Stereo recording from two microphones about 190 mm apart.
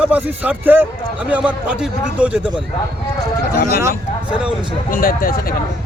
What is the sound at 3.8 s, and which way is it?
Speech, 5° right (ahead or behind).